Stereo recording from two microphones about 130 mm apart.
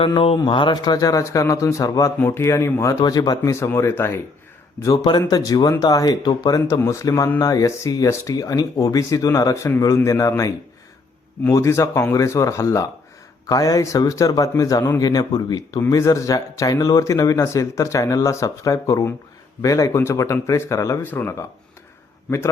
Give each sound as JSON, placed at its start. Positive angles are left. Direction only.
{"t": 0.0, "sound": "speech", "side_deg": 45}
{"t": 3.0, "sound": "speech", "side_deg": 30}
{"t": 5.3, "sound": "speech", "side_deg": 30}